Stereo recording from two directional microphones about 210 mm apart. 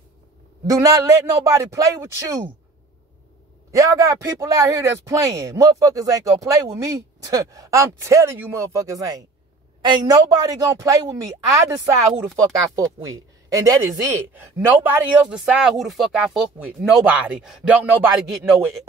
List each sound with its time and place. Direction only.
0.7 s speech: 15° right (ahead or behind)
3.7 s speech: 15° right (ahead or behind)